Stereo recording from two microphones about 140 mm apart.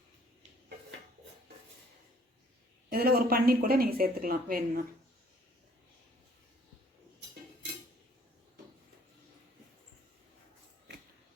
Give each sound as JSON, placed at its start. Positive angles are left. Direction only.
{"t": 2.9, "sound": "a woman's voice", "side_deg": -90}